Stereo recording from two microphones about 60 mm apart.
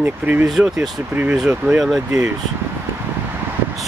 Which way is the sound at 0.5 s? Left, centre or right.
Centre.